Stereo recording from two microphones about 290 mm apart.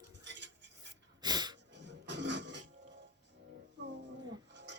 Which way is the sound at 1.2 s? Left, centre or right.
Centre.